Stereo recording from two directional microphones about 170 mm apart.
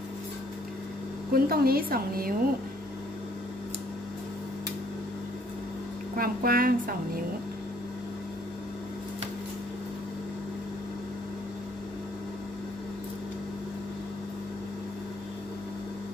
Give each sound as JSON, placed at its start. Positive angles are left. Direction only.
{"t": 1.3, "sound": "a woman's voice", "side_deg": -60}
{"t": 6.1, "sound": "a woman's voice", "side_deg": -60}